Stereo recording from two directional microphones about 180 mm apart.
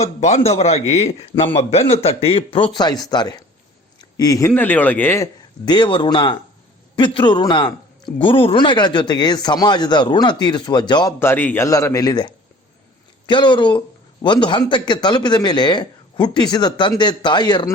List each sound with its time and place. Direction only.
0.0 s a man's voice: 40° left (ahead or behind); by 11.1 s 25° left (ahead or behind)
11.2 s a man's voice: 10° left (ahead or behind)